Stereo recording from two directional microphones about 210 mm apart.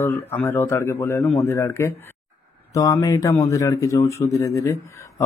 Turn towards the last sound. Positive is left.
turn(degrees=15)  # may be behind; listen again after turning